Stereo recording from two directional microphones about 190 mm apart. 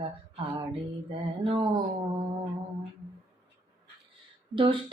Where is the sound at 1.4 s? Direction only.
25° right (ahead or behind).